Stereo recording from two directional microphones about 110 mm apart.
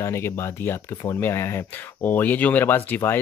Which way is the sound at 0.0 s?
25° left (ahead or behind).